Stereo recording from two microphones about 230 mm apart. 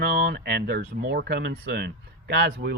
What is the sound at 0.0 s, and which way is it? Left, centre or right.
Speech, right.